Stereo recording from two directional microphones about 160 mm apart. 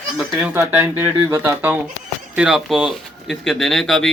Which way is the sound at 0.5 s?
15° right (ahead or behind).